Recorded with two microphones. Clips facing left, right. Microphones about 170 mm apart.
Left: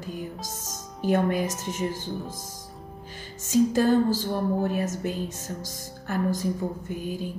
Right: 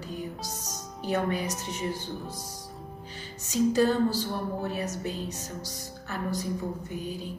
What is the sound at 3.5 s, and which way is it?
A woman's voice, 50° left (ahead or behind).